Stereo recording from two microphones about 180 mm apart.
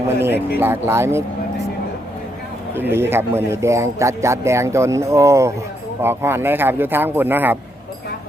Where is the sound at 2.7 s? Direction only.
10° right (ahead or behind).